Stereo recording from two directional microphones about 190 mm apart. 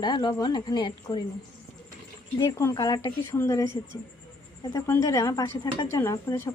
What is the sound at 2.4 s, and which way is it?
A woman's voice, 15° left (ahead or behind).